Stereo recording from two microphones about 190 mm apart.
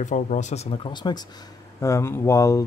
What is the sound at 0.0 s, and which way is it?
Speech, 40° left (ahead or behind).